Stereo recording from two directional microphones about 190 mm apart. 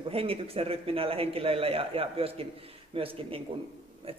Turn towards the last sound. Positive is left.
turn(degrees=-30)  # may be behind; listen again after turning